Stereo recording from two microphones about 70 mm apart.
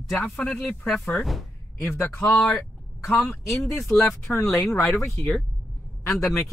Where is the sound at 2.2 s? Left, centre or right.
Centre.